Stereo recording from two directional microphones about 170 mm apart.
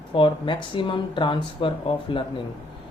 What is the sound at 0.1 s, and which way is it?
Speech, 30° left (ahead or behind).